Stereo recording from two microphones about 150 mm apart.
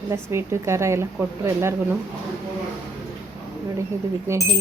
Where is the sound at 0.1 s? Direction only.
20° right (ahead or behind).